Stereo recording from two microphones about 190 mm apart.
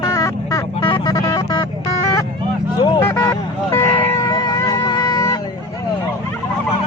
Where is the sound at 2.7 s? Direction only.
20° left (ahead or behind).